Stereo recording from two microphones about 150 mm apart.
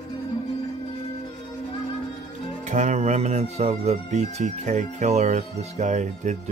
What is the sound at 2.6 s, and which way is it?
Speech, 50° right (ahead or behind).